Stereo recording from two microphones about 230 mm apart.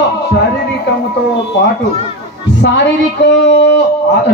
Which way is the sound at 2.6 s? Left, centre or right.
Left.